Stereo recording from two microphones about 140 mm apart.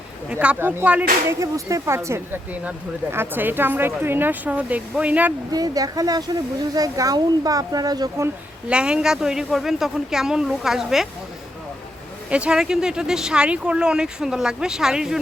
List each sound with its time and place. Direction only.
0.3 s speech: 10° right (ahead or behind)
1.3 s speech: 20° right (ahead or behind)
5.5 s speech: 25° right (ahead or behind)
8.7 s speech: 5° right (ahead or behind)
12.3 s speech: 5° right (ahead or behind)